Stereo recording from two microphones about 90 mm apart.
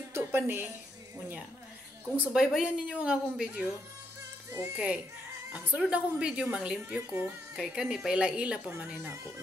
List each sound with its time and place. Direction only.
0.1 s a woman's voice: 25° right (ahead or behind)
2.3 s a woman's voice: 5° right (ahead or behind)
4.7 s a woman's voice: 10° right (ahead or behind)
7.5 s a woman's voice: 5° right (ahead or behind)